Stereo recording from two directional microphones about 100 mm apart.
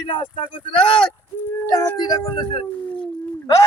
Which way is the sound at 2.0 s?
45° left (ahead or behind).